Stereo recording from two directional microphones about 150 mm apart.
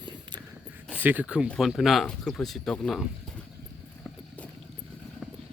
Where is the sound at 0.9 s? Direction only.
10° right (ahead or behind).